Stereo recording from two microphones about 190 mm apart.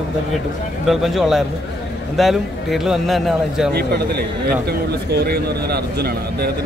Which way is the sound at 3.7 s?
55° right (ahead or behind).